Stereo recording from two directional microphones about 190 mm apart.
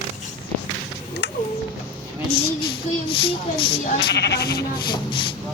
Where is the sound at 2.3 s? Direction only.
30° left (ahead or behind).